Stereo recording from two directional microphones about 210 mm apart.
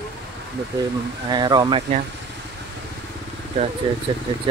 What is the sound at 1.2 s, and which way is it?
Speech, 20° right (ahead or behind).